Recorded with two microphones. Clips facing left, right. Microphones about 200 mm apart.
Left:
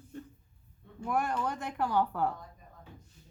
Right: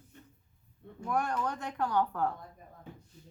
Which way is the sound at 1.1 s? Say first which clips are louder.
Even; 5° left (ahead or behind).